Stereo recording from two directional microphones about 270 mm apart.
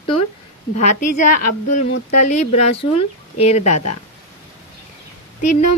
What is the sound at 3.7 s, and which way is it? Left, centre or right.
Speech, left.